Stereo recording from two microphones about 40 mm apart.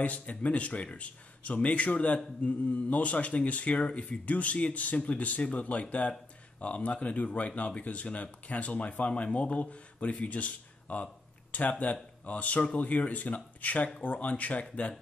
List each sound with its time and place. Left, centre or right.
0.0 s speech: left